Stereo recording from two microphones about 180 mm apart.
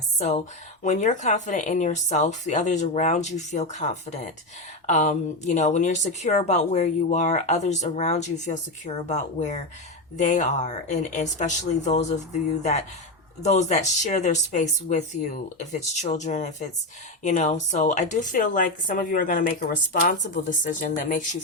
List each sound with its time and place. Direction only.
0.2 s speech: 40° left (ahead or behind)